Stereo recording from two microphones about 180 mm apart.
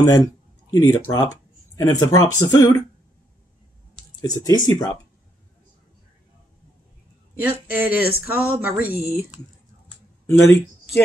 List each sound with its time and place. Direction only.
0.0 s speech: 15° left (ahead or behind)
4.2 s speech: 20° left (ahead or behind)
7.3 s speech: 10° right (ahead or behind)
10.2 s speech: 15° left (ahead or behind)